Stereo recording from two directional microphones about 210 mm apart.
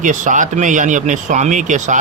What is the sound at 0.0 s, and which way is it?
Speech, 35° right (ahead or behind).